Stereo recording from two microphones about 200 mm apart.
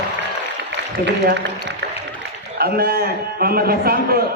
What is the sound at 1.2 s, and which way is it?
A man's voice, 60° right (ahead or behind).